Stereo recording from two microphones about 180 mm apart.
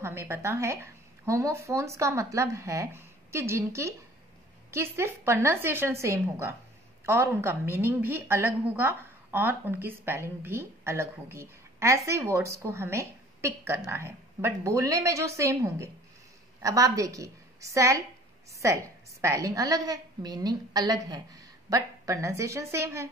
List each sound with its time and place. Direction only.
0.0 s a woman's voice: 15° right (ahead or behind)